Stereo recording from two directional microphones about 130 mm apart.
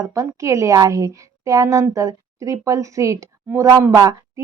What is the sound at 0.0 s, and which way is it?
A woman's voice, 25° right (ahead or behind).